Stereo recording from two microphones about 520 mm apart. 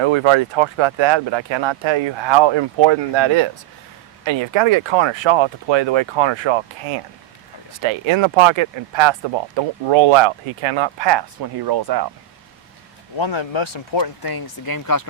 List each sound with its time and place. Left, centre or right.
0.0 s speech: right
13.1 s speech: left